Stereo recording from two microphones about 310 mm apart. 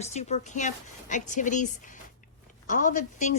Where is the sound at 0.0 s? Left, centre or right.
Left.